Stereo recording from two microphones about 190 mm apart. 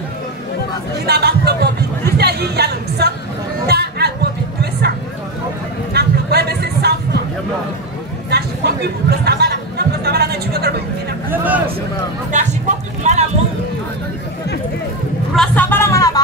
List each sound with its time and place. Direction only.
1.0 s speech: 55° right (ahead or behind)
3.6 s music: 60° right (ahead or behind)
5.9 s a sound: 60° right (ahead or behind)
8.3 s chatter: 60° right (ahead or behind)
11.2 s speech: 10° right (ahead or behind)
12.3 s speech: 40° right (ahead or behind)
15.3 s music: 5° left (ahead or behind)